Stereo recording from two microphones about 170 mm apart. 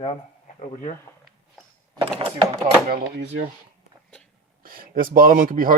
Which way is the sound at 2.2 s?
30° right (ahead or behind).